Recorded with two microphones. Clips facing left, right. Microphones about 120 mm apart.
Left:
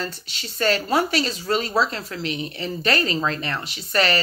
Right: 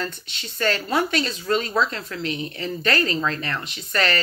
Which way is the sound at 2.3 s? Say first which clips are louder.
Even; 20° left (ahead or behind).